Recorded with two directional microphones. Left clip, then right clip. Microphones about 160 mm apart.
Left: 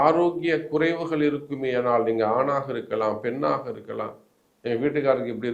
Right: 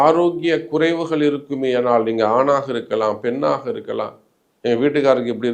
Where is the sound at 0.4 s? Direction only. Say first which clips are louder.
Right 5 dB; 35° right (ahead or behind).